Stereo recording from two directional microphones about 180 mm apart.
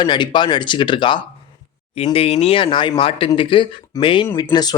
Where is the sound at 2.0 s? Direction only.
35° left (ahead or behind).